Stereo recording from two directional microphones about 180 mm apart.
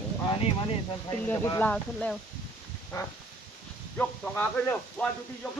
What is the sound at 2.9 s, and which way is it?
A man's voice, 15° left (ahead or behind).